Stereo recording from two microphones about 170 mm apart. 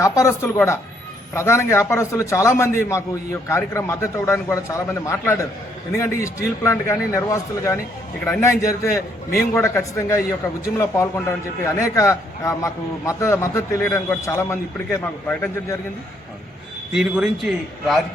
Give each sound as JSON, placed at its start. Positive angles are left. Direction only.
{"t": 0.0, "sound": "a man's voice", "side_deg": 20}
{"t": 16.9, "sound": "a man's voice", "side_deg": -5}